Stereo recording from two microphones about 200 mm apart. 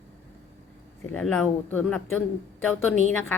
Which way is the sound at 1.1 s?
5° left (ahead or behind).